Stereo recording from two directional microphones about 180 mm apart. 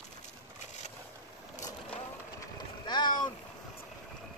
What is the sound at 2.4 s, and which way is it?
Boat, 25° left (ahead or behind).